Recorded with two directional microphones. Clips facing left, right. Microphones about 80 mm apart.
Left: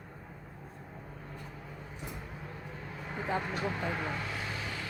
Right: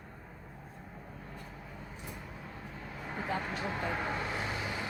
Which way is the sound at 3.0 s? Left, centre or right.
Centre.